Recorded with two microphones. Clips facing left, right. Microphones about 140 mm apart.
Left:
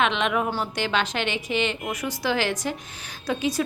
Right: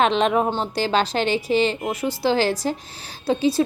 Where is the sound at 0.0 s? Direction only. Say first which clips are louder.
Right 5 dB; 35° right (ahead or behind).